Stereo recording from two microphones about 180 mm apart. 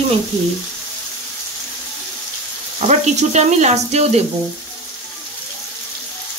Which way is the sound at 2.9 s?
40° right (ahead or behind).